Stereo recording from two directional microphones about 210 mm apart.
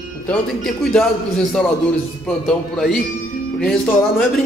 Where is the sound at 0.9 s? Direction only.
5° left (ahead or behind).